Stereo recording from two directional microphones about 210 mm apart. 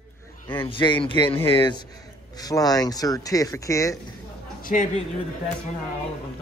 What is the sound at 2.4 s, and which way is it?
Speech, 15° left (ahead or behind).